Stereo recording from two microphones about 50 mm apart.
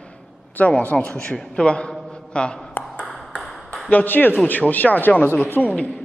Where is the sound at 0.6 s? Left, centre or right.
Left.